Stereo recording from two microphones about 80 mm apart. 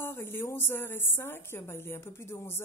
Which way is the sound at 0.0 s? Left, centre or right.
Left.